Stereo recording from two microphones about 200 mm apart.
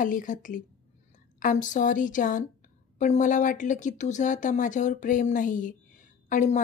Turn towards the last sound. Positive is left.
turn(degrees=40)  # may be behind; listen again after turning